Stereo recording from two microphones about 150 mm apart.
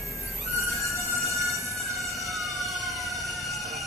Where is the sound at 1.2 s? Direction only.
20° right (ahead or behind).